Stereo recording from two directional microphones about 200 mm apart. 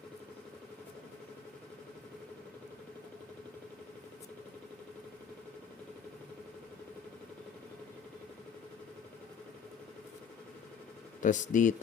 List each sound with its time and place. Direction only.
11.2 s speech: 40° left (ahead or behind)